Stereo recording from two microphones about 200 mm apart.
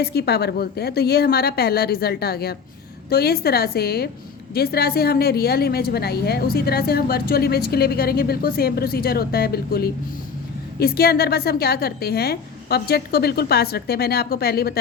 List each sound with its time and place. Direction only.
0.0 s a woman's voice: 55° left (ahead or behind)